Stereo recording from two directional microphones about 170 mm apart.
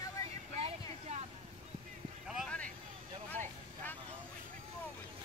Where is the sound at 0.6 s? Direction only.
40° right (ahead or behind).